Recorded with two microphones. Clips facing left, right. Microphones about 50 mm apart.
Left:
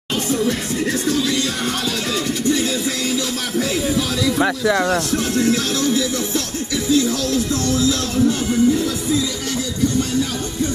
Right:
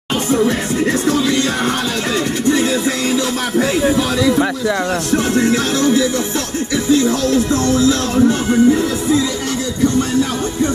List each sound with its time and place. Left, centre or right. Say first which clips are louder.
0.3 s speech: right 5 dB; centre
2.5 s music: right 5 dB; centre
4.4 s speech: right 1 dB; centre
5.1 s music: right 4 dB; right
6.9 s speech: right 4 dB; centre